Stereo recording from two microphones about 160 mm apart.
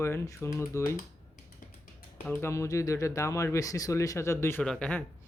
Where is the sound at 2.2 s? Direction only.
10° left (ahead or behind).